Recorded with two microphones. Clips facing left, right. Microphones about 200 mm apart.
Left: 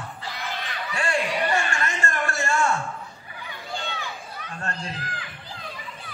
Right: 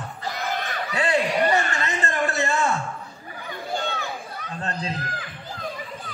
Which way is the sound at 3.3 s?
45° right (ahead or behind).